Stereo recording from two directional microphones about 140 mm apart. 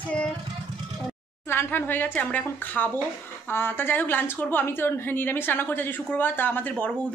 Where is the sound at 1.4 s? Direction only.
15° left (ahead or behind).